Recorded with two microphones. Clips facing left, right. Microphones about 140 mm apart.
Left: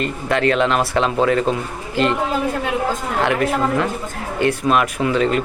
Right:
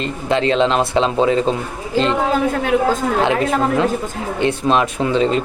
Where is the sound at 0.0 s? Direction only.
25° right (ahead or behind).